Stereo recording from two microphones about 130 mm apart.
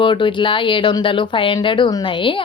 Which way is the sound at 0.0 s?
40° left (ahead or behind).